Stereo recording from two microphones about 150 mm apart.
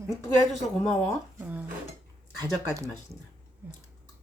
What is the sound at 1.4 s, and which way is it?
Speech, 10° right (ahead or behind).